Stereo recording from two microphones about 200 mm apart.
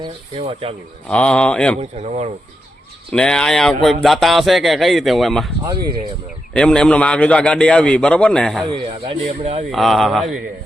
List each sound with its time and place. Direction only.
0.0 s speech: 25° right (ahead or behind)
1.0 s speech: 5° left (ahead or behind)
2.0 s speech: 35° right (ahead or behind)
3.1 s speech: 5° left (ahead or behind)
5.6 s speech: 20° right (ahead or behind)
6.5 s speech: 5° left (ahead or behind)
8.7 s speech: 30° right (ahead or behind)
9.7 s speech: centre (ahead or behind)